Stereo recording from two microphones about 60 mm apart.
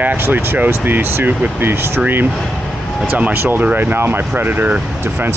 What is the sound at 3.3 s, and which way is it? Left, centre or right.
Speech, right.